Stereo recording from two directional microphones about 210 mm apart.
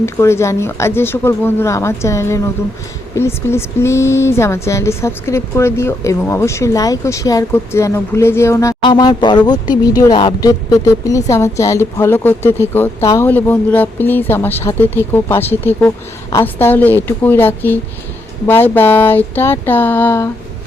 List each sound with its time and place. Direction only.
0.0 s speech: 10° left (ahead or behind)